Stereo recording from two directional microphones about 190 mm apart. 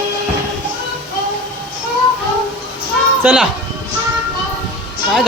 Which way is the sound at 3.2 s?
5° right (ahead or behind).